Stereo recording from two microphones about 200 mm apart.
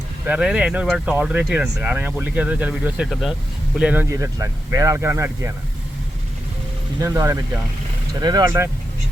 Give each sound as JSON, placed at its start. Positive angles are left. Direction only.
{"t": 0.3, "sound": "speech", "side_deg": -5}
{"t": 7.0, "sound": "speech", "side_deg": -15}